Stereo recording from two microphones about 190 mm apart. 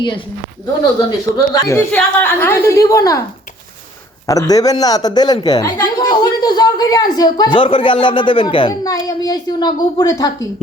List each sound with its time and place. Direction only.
1.3 s a woman's voice: 20° left (ahead or behind)
4.3 s speech: 20° left (ahead or behind)